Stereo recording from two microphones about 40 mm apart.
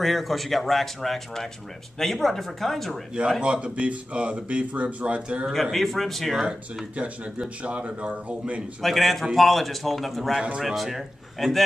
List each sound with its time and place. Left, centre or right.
0.0 s speech: centre
3.2 s speech: right
3.6 s speech: right
5.5 s speech: centre
7.0 s a man's voice: right
8.8 s speech: centre